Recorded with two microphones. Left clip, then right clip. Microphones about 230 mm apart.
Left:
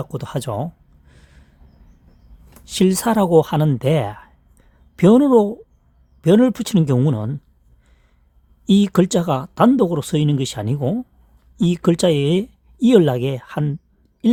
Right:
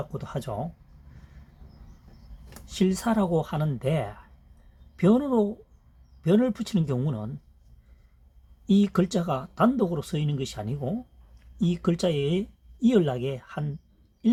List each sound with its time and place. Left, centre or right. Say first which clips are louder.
0.0 s speech: left 7 dB; left
2.6 s speech: left 9 dB; left
8.6 s speech: left 8 dB; left